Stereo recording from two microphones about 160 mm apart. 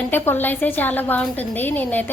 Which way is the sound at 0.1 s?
10° left (ahead or behind).